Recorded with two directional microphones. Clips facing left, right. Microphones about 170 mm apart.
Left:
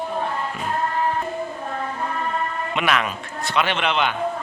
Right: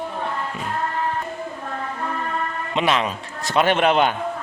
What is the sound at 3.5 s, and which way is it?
Speech, 45° right (ahead or behind).